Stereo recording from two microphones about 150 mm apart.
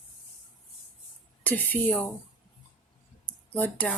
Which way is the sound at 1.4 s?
10° left (ahead or behind).